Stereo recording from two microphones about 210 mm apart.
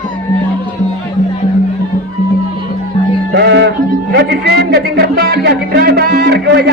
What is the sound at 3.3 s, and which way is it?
Music, 55° right (ahead or behind).